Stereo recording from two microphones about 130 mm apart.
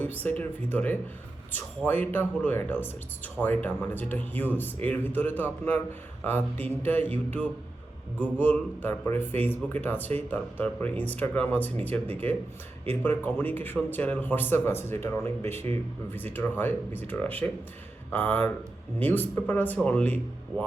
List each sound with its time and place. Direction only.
0.0 s speech: 15° left (ahead or behind)
8.2 s speech: 15° left (ahead or behind)